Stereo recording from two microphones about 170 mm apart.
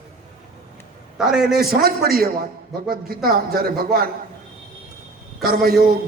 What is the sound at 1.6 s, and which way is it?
A man's voice, 65° right (ahead or behind).